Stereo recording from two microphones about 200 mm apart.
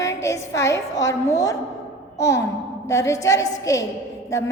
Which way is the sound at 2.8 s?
15° left (ahead or behind).